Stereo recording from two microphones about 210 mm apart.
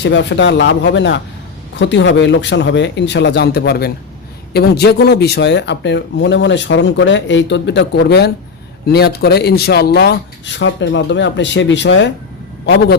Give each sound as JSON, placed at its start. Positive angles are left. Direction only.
{"t": 0.0, "sound": "speech", "side_deg": 55}